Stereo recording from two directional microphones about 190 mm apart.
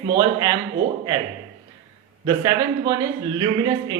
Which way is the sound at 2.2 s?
20° right (ahead or behind).